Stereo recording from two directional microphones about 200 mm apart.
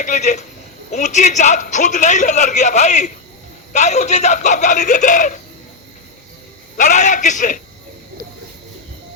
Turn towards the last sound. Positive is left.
turn(degrees=40)  # may be behind; listen again after turning